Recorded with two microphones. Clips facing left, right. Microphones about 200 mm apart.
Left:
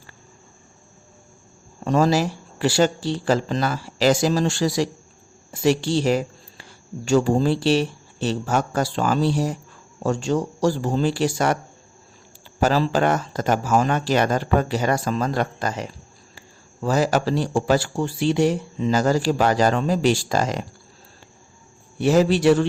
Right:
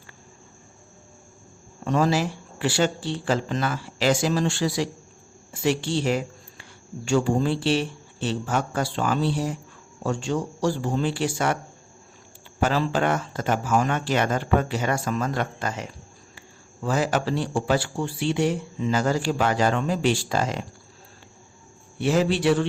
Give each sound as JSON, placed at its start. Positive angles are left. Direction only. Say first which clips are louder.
{"t": 1.8, "sound": "speech", "louder": "left 3 dB", "side_deg": 40}
{"t": 12.5, "sound": "speech", "louder": "left 4 dB", "side_deg": 40}
{"t": 21.9, "sound": "speech", "louder": "left 4 dB", "side_deg": 40}